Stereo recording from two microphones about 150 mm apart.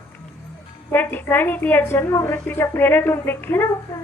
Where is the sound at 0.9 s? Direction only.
15° left (ahead or behind).